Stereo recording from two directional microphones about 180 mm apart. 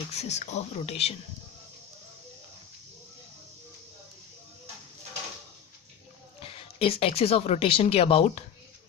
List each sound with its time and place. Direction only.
0.1 s speech: 35° left (ahead or behind)
6.4 s speech: 30° left (ahead or behind)